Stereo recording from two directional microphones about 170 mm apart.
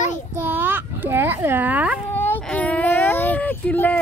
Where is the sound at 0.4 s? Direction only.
10° right (ahead or behind).